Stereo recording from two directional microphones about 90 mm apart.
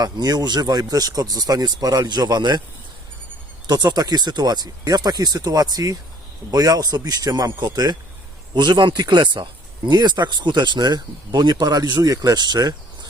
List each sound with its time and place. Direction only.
0.0 s speech: 45° right (ahead or behind)
3.7 s speech: 50° right (ahead or behind)